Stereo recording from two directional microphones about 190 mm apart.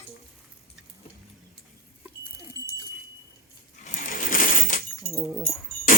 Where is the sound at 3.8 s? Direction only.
45° left (ahead or behind).